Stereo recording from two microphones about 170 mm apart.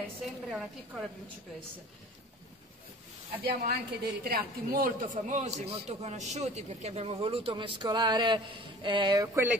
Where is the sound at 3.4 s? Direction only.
65° right (ahead or behind); by 9.5 s 15° right (ahead or behind).